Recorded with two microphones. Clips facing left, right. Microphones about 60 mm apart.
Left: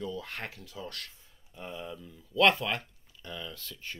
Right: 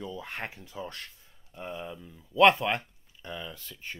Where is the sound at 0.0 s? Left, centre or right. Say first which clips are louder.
Even; centre.